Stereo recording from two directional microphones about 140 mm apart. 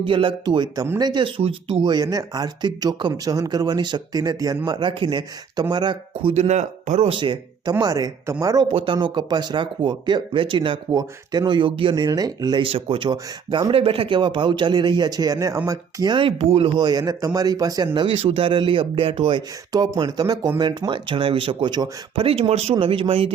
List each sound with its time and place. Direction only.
0.0 s speech: 35° right (ahead or behind)
1.8 s speech: 30° right (ahead or behind)
6.1 s speech: 45° right (ahead or behind)
7.1 s speech: 35° right (ahead or behind)
8.7 s speech: 35° right (ahead or behind)
19.4 s speech: 30° right (ahead or behind)